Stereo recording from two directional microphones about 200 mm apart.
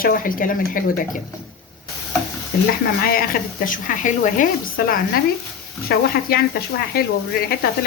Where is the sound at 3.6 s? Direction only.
40° left (ahead or behind).